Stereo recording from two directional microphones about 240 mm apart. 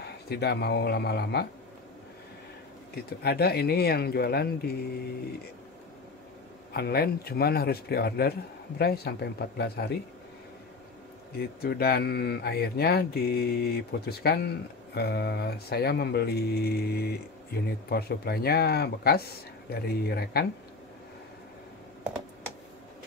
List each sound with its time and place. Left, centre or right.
0.0 s speech: left
2.9 s speech: left
6.7 s speech: left
11.3 s speech: left